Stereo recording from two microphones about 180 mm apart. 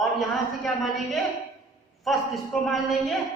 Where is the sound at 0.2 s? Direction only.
Centre (ahead or behind).